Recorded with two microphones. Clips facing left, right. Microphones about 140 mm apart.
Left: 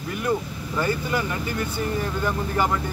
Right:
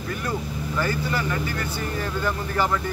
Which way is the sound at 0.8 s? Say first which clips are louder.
Left 2 dB; 15° left (ahead or behind).